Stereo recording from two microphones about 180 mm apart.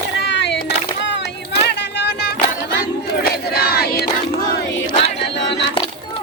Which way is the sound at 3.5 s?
60° left (ahead or behind).